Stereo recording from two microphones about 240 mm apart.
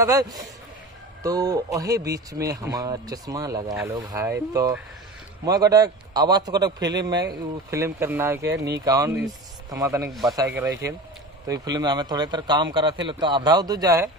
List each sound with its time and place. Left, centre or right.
0.0 s speech: centre